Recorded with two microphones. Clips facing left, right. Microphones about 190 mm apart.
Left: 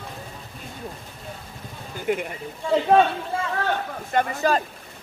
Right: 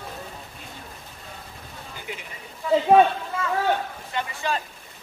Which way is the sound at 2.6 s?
25° left (ahead or behind).